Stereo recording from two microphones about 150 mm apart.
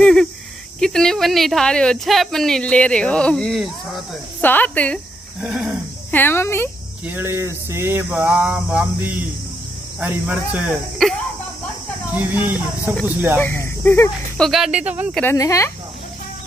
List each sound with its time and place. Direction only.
0.0 s a sound: 5° left (ahead or behind)
0.7 s speech: 5° left (ahead or behind)
4.4 s speech: 10° left (ahead or behind)
5.4 s speech: 5° right (ahead or behind)
6.1 s speech: 15° left (ahead or behind)
7.1 s mantra: 15° right (ahead or behind)
11.0 s speech: centre (ahead or behind)
12.2 s mantra: 15° right (ahead or behind)
13.4 s speech: 15° left (ahead or behind)
14.4 s mantra: centre (ahead or behind)
15.2 s speech: 20° left (ahead or behind)